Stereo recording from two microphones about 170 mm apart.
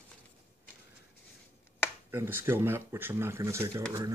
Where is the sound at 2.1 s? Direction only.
15° right (ahead or behind).